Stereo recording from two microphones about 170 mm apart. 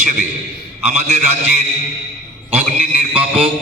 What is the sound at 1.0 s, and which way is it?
Speech, 40° right (ahead or behind).